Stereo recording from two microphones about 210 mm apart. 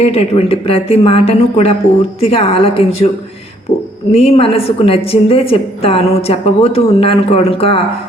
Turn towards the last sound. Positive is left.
turn(degrees=25)  # may be behind; listen again after turning